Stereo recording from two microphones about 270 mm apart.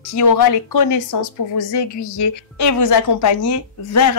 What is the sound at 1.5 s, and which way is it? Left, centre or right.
A woman's voice, left.